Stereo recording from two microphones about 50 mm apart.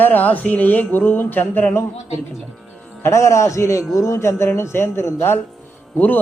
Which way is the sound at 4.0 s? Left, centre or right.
Left.